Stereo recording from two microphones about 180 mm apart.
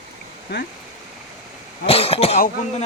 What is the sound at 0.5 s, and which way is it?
Speech, 65° left (ahead or behind).